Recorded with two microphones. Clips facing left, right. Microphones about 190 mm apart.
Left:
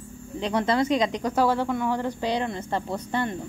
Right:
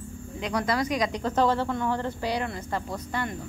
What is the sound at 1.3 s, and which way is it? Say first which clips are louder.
Speech: even; 10° left (ahead or behind).